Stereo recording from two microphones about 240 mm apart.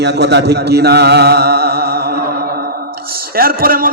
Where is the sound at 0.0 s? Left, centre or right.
Right.